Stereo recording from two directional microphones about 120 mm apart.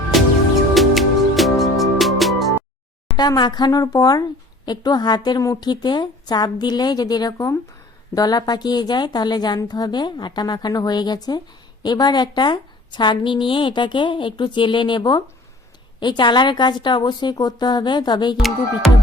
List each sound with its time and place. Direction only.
0.1 s music: centre (ahead or behind)
3.2 s a woman's voice: 35° left (ahead or behind)